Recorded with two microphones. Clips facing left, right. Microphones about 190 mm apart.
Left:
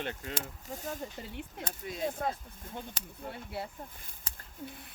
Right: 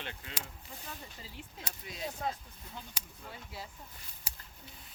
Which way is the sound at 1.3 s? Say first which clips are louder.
Left 7 dB; 60° left (ahead or behind).